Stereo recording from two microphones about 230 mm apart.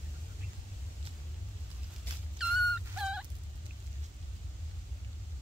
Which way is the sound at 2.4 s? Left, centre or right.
Centre.